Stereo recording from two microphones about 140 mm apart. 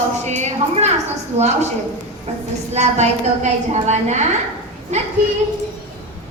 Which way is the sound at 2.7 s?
55° right (ahead or behind).